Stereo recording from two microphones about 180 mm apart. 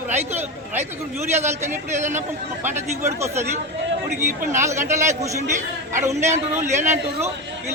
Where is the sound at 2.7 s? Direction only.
15° right (ahead or behind).